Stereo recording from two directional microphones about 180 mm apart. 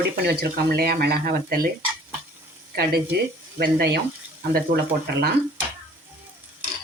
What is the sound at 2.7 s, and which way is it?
Speech, 60° right (ahead or behind).